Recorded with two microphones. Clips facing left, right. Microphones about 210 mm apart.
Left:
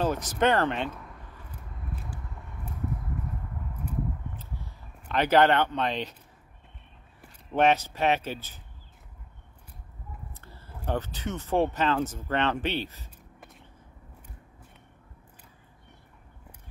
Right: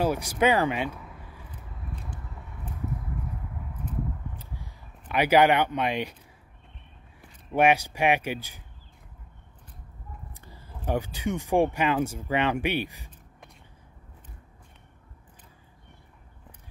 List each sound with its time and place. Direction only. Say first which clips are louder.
0.0 s speech: right 1 dB; 10° right (ahead or behind)
1.9 s vehicle: left 1 dB; 5° left (ahead or behind)
4.4 s a sound: left 1 dB; 10° right (ahead or behind)
7.5 s speech: right 1 dB; 10° right (ahead or behind)
10.3 s a sound: even; 15° right (ahead or behind)
10.9 s speech: right 3 dB; 10° right (ahead or behind)